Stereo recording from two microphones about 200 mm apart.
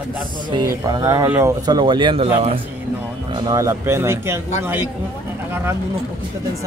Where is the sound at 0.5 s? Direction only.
15° right (ahead or behind).